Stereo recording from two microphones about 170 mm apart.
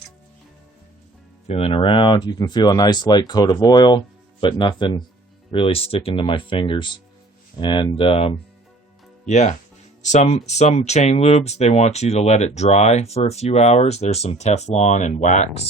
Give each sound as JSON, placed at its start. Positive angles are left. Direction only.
{"t": 1.5, "sound": "speech", "side_deg": 35}
{"t": 9.2, "sound": "speech", "side_deg": 45}